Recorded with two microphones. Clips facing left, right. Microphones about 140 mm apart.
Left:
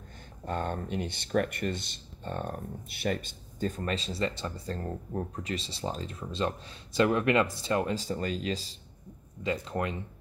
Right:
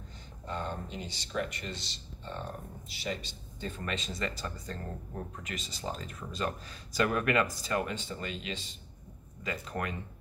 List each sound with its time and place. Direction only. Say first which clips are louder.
0.5 s speech: left 5 dB; 55° left (ahead or behind); by 8.7 s 35° left (ahead or behind)
9.4 s speech: left 5 dB; 25° left (ahead or behind)